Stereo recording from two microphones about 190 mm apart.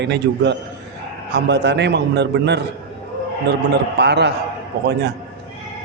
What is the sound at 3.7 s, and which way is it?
A man's voice, 60° right (ahead or behind).